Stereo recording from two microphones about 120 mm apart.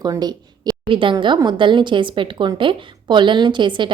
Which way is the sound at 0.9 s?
45° right (ahead or behind).